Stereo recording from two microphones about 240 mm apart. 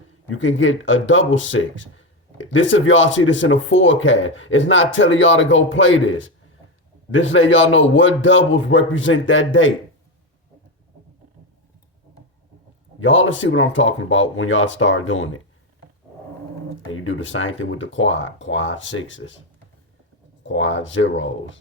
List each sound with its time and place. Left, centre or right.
0.3 s speech: left
13.0 s speech: left
16.9 s speech: left
20.4 s speech: left